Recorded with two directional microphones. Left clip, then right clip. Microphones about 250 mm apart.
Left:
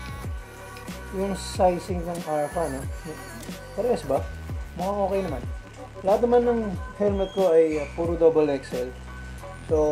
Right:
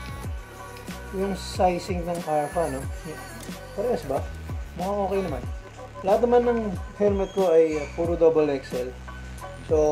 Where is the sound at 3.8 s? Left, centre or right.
Centre.